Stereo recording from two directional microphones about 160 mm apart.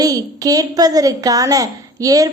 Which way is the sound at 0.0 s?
20° right (ahead or behind).